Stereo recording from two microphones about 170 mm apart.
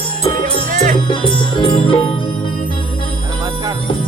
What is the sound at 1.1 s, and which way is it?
Music, 30° left (ahead or behind).